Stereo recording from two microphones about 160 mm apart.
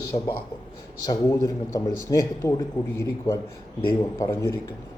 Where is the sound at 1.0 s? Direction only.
20° left (ahead or behind).